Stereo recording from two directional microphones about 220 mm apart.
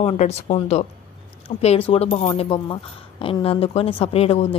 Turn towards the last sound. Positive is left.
turn(degrees=25)  # may be behind; listen again after turning